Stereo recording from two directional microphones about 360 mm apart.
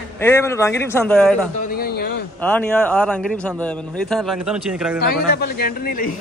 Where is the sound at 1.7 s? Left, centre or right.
Left.